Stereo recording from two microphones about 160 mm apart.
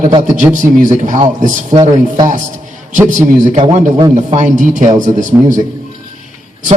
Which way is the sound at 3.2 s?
50° right (ahead or behind).